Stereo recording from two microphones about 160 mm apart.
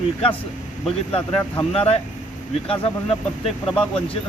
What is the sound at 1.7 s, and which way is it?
Speech, 40° left (ahead or behind).